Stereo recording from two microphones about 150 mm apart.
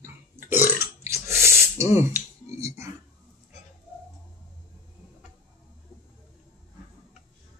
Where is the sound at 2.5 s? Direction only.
20° right (ahead or behind).